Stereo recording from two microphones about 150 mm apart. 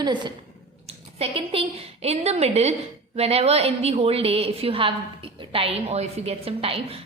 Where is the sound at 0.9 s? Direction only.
45° right (ahead or behind).